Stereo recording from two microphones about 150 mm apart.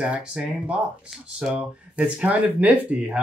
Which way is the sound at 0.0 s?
5° right (ahead or behind).